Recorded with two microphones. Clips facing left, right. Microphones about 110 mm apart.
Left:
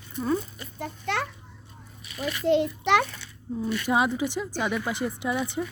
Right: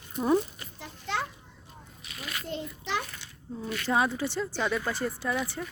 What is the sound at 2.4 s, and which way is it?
Speech, 85° left.